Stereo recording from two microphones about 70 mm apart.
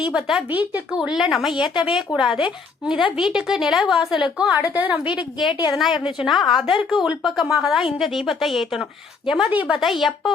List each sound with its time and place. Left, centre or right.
0.1 s a woman's voice: centre
4.7 s a woman's voice: right
5.7 s a woman's voice: centre
9.5 s a woman's voice: right
9.7 s speech: centre